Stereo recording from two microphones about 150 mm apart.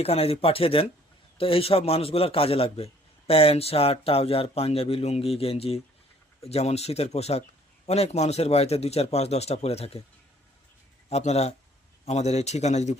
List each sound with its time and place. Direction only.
0.0 s a man's voice: 40° left (ahead or behind)
11.1 s a man's voice: 45° left (ahead or behind)